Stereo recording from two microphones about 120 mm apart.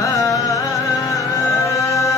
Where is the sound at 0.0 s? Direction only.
25° left (ahead or behind).